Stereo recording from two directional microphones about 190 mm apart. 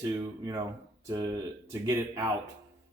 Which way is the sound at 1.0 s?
20° right (ahead or behind).